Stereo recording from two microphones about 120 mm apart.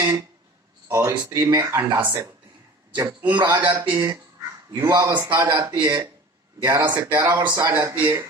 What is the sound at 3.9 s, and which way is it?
Speech, 35° right (ahead or behind).